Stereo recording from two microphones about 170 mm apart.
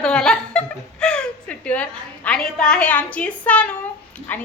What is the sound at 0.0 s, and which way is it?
Laughter, 5° left (ahead or behind).